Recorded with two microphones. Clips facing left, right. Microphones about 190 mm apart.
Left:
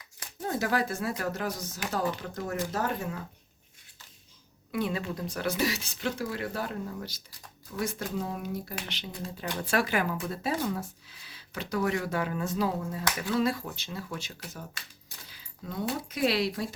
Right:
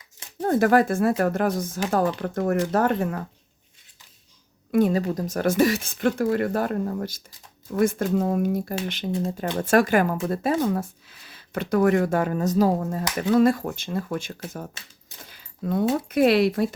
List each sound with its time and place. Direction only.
0.4 s speech: 55° right (ahead or behind)
4.7 s speech: 45° right (ahead or behind)